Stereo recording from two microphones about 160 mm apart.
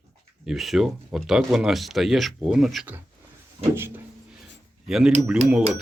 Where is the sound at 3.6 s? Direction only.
45° right (ahead or behind).